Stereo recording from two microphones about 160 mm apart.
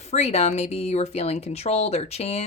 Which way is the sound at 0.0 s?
40° left (ahead or behind).